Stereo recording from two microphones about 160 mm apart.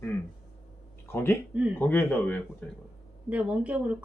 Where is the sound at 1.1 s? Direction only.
15° left (ahead or behind).